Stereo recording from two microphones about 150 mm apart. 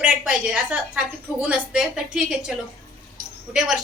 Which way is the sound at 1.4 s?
5° right (ahead or behind).